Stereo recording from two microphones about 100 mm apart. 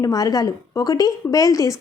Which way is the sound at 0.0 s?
40° left (ahead or behind).